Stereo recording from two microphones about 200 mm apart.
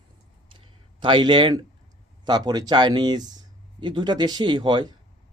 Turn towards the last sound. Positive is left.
turn(degrees=-20)  # may be behind; listen again after turning